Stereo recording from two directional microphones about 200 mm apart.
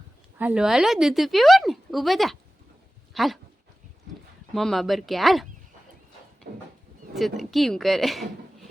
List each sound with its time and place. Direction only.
0.3 s a woman's voice: 5° right (ahead or behind)
4.5 s a woman's voice: centre (ahead or behind)
6.5 s a sound: 55° right (ahead or behind)
7.1 s a woman's voice: centre (ahead or behind)